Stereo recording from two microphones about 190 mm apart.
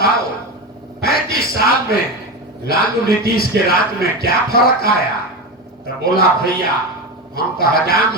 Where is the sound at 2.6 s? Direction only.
55° left (ahead or behind).